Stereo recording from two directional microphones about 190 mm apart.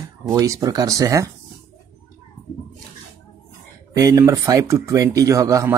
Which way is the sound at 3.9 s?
15° right (ahead or behind).